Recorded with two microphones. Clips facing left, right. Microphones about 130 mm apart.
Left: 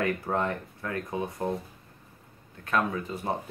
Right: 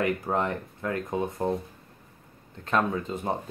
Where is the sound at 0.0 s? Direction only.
20° right (ahead or behind).